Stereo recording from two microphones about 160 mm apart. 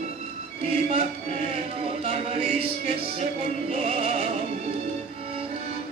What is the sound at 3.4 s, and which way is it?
Music, 40° right (ahead or behind).